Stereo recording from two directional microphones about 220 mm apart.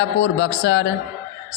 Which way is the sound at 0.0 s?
55° left (ahead or behind).